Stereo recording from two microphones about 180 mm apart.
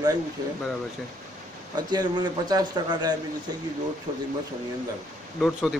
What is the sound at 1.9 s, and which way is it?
A man's voice, 20° right (ahead or behind).